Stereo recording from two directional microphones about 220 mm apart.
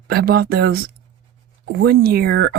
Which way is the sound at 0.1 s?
45° right (ahead or behind).